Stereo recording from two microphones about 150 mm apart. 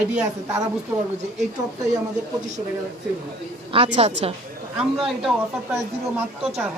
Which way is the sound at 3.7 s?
40° right (ahead or behind).